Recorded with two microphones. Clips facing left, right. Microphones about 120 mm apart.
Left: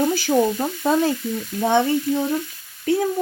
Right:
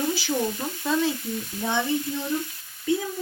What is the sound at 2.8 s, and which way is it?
Speech, 70° left (ahead or behind).